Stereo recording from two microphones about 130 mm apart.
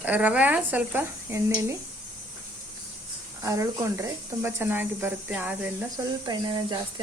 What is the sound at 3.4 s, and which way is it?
Speech, 25° right (ahead or behind).